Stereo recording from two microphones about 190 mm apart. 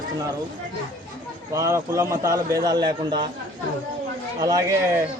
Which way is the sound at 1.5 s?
15° right (ahead or behind).